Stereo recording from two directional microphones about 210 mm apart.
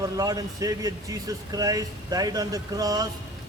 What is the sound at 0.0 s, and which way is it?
Speech, 15° right (ahead or behind).